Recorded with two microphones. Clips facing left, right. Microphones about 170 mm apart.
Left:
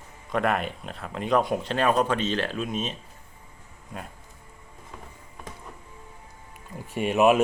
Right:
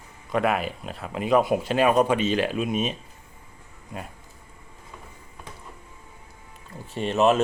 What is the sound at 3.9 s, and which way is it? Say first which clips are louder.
Speech: right 2 dB; centre (ahead or behind).